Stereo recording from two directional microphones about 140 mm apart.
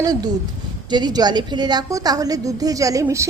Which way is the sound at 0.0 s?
25° right (ahead or behind).